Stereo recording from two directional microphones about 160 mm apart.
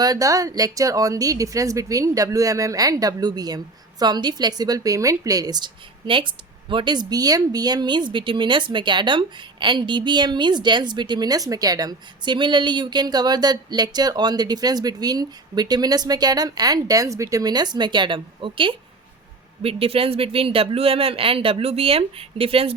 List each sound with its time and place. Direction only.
0.0 s a woman's voice: 20° right (ahead or behind)